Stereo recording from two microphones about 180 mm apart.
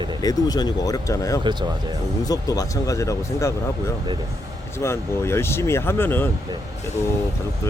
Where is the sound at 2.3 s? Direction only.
20° left (ahead or behind).